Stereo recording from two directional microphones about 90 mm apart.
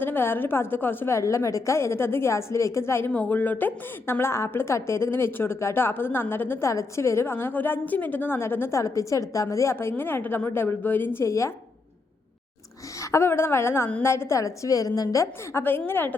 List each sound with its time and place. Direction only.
0.0 s a woman's voice: 25° left (ahead or behind)
3.1 s a woman's voice: 15° left (ahead or behind)
6.7 s a woman's voice: 35° left (ahead or behind)
13.0 s a woman's voice: 35° left (ahead or behind)
15.9 s a woman's voice: 25° left (ahead or behind)